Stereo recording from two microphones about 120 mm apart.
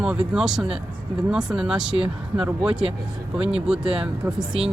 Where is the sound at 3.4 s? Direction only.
55° right (ahead or behind).